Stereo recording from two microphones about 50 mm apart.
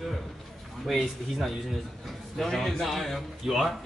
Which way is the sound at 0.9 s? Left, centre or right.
Centre.